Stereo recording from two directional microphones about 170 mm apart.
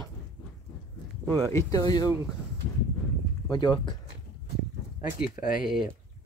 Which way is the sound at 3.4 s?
25° left (ahead or behind).